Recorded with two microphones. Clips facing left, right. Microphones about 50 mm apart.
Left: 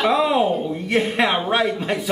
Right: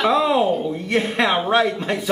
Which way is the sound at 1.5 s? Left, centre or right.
Centre.